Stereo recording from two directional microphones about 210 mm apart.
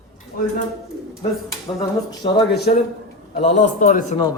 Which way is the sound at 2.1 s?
20° left (ahead or behind).